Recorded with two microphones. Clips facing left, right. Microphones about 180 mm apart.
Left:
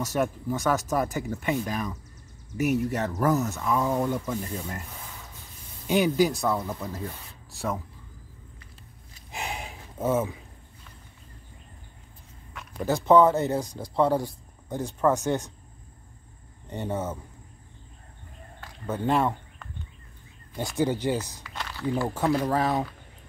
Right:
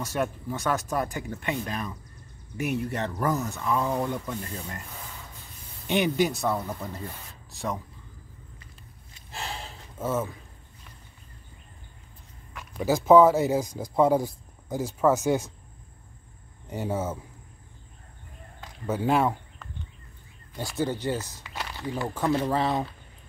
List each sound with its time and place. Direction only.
0.0 s speech: 15° left (ahead or behind)
5.9 s speech: centre (ahead or behind)
9.3 s a sound: 15° left (ahead or behind)
12.5 s speech: 5° right (ahead or behind)
16.6 s speech: 5° right (ahead or behind)
18.9 s speech: 5° right (ahead or behind)
20.5 s speech: 15° left (ahead or behind)
21.5 s walk: 15° right (ahead or behind)
22.5 s speech: centre (ahead or behind)